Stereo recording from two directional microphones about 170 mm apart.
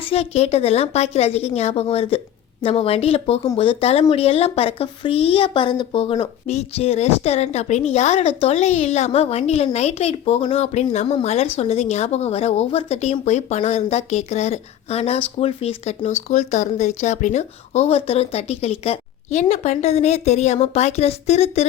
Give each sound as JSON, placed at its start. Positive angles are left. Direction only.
{"t": 0.0, "sound": "speech", "side_deg": 35}